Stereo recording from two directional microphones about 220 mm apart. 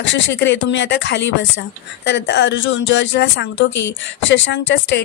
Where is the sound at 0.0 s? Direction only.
55° left (ahead or behind).